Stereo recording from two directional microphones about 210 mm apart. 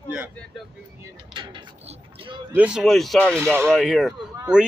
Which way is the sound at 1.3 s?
25° right (ahead or behind).